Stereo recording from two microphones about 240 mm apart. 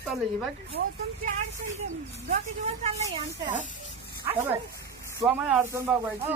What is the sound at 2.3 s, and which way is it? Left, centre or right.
Speech, right.